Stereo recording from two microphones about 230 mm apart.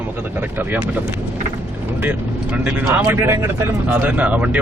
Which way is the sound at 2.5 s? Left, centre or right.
Centre.